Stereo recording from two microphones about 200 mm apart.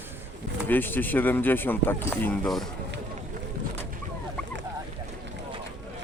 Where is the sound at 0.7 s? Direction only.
10° left (ahead or behind).